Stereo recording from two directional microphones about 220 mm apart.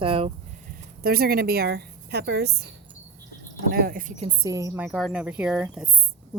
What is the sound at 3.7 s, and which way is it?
Speech, 40° right (ahead or behind).